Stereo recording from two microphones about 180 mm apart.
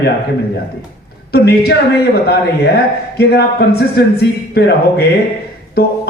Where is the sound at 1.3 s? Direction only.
65° left (ahead or behind).